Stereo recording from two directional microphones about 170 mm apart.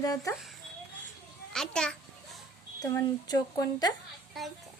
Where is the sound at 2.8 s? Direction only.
20° left (ahead or behind).